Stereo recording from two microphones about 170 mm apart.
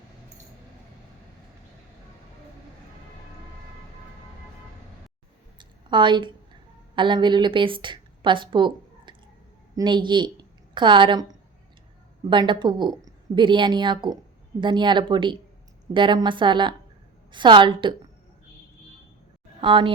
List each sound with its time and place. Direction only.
5.5 s a sound: 30° right (ahead or behind)
9.7 s a woman's voice: 25° right (ahead or behind)
12.3 s a woman's voice: 30° right (ahead or behind)
19.6 s a woman's voice: 30° right (ahead or behind)